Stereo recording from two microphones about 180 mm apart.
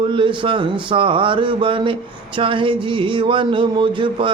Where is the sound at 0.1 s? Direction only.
25° right (ahead or behind).